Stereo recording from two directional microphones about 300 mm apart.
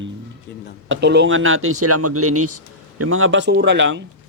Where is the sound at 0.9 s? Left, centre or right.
Right.